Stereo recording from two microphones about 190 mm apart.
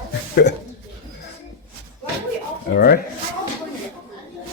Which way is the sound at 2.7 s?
55° left (ahead or behind).